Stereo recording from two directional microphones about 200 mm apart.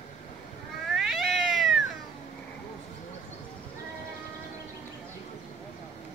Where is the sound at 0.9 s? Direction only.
Centre (ahead or behind).